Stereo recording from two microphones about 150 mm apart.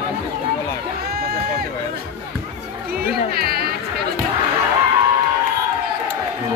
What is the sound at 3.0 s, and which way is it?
Music, 90° right.